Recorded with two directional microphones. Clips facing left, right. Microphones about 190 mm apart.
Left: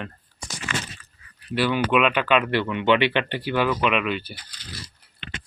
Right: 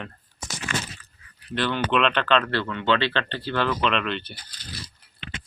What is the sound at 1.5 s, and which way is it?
Speech, 10° left (ahead or behind).